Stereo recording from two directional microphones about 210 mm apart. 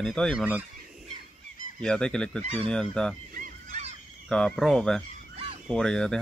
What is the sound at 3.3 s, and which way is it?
Goose, 35° right (ahead or behind).